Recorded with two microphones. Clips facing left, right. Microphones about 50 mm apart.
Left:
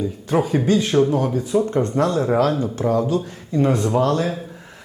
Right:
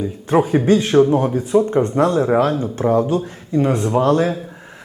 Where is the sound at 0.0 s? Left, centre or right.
Right.